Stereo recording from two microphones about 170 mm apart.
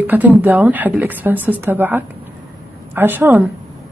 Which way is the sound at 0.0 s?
10° right (ahead or behind).